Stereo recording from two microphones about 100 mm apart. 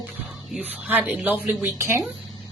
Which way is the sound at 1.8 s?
25° right (ahead or behind).